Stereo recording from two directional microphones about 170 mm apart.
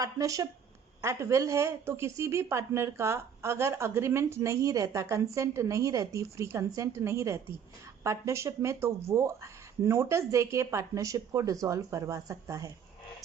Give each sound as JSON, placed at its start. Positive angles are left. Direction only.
{"t": 0.0, "sound": "a woman's voice", "side_deg": -20}